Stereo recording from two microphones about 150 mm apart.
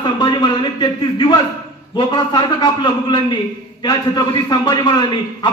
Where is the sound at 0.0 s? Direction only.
30° left (ahead or behind).